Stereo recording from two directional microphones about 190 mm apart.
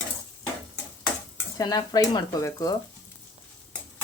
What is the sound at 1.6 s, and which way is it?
Speech, 20° left (ahead or behind).